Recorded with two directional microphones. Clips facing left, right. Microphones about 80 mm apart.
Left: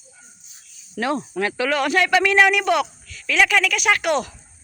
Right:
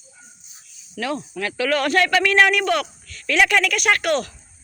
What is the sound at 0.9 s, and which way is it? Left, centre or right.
Speech, left.